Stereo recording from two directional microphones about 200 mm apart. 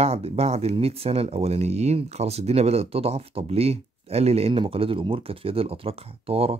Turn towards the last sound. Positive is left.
turn(degrees=-30)  # may be behind; listen again after turning